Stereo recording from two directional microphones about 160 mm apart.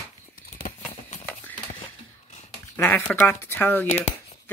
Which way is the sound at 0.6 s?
60° left (ahead or behind).